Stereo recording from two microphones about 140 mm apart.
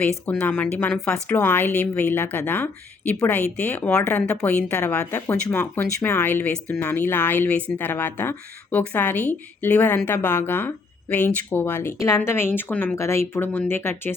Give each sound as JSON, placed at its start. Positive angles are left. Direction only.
{"t": 0.3, "sound": "speech", "side_deg": 15}